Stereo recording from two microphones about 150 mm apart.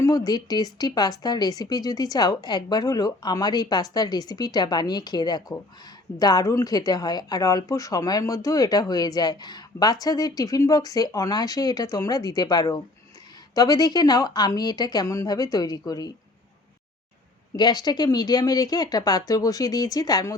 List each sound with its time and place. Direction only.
0.0 s speech: 25° left (ahead or behind)
17.6 s speech: 25° left (ahead or behind)